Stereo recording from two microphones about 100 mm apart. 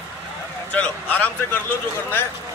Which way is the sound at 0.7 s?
15° left (ahead or behind).